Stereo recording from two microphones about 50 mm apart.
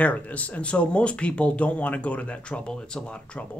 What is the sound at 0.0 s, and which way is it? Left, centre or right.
Speech, left.